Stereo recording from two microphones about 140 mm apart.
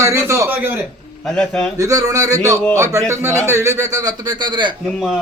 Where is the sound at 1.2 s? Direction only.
5° left (ahead or behind).